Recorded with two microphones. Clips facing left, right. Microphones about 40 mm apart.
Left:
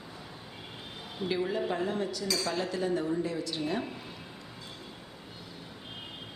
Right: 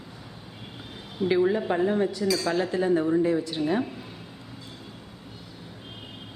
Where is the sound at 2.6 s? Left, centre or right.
Right.